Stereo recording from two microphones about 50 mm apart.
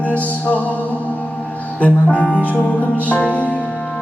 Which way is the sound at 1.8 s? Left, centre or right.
Left.